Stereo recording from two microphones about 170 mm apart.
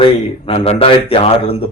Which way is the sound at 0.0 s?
35° left (ahead or behind).